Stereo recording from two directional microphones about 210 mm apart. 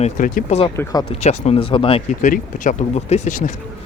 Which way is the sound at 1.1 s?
30° left (ahead or behind).